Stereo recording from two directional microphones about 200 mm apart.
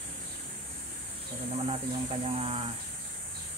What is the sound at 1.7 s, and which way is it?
Speech, 30° right (ahead or behind).